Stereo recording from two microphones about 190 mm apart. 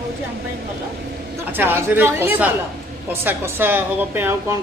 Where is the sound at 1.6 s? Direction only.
10° right (ahead or behind).